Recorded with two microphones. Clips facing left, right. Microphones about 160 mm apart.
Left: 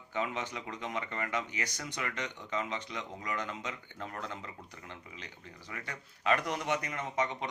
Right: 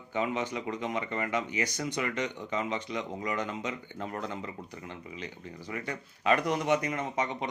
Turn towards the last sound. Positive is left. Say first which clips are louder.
# right 2 dB
turn(degrees=-15)  # may be behind; listen again after turning